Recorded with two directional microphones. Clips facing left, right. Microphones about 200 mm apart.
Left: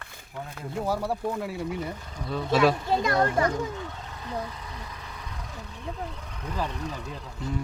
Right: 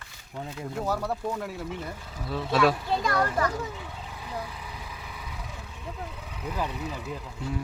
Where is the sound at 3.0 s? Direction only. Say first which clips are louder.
Left 2 dB; 25° left (ahead or behind).